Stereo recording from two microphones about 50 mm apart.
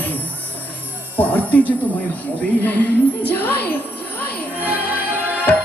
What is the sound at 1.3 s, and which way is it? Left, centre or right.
Music, left.